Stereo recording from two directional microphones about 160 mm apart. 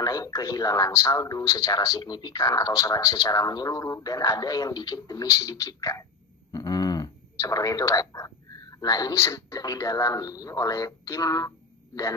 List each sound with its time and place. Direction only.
0.0 s speech: 20° left (ahead or behind)
6.5 s a sound: 25° left (ahead or behind)
8.7 s speech: 25° left (ahead or behind)